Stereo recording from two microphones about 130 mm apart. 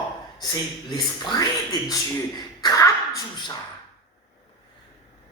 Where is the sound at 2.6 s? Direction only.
25° left (ahead or behind).